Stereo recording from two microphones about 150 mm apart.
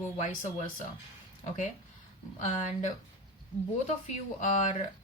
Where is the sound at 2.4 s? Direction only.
55° left (ahead or behind).